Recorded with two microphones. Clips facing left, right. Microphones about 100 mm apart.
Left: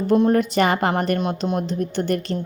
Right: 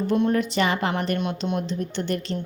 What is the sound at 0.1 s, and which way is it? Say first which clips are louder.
A woman's voice: left 6 dB; 45° left (ahead or behind).